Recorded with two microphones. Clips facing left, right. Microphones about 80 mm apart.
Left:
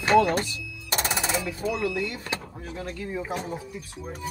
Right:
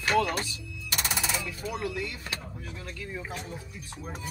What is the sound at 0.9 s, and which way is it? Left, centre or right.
Music, left.